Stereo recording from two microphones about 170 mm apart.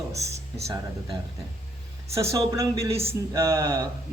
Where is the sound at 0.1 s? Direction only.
15° right (ahead or behind).